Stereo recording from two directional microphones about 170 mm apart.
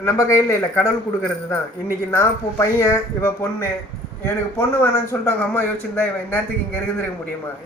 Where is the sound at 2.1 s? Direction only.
15° left (ahead or behind).